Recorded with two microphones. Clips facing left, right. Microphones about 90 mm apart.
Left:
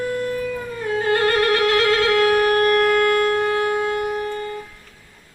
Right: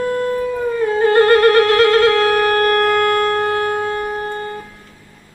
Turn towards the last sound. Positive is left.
turn(degrees=-40)  # may be behind; listen again after turning